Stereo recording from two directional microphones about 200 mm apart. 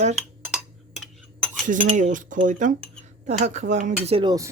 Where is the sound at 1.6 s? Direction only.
40° right (ahead or behind).